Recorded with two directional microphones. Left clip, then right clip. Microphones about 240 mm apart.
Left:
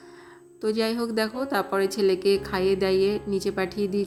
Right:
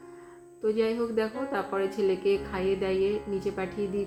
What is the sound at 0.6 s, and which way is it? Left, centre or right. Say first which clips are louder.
Speech: left 1 dB; left.